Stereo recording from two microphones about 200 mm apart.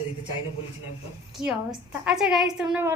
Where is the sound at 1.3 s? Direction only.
5° right (ahead or behind).